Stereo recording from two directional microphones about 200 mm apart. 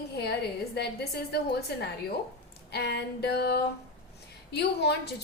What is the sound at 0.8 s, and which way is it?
Speech, 55° left (ahead or behind).